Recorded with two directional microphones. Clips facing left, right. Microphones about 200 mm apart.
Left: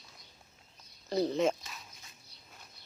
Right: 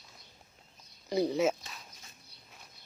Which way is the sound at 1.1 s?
10° right (ahead or behind).